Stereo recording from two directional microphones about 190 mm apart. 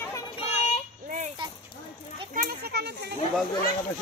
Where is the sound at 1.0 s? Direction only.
40° right (ahead or behind).